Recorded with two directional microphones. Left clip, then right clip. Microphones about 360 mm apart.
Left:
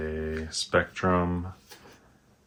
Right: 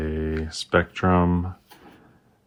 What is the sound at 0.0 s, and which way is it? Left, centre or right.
Speech, right.